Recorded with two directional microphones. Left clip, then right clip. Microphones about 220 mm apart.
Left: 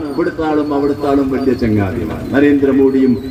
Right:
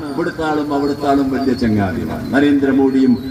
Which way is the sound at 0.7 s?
40° right (ahead or behind).